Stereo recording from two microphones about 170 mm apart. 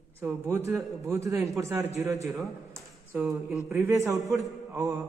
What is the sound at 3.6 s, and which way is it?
Speech, 15° right (ahead or behind).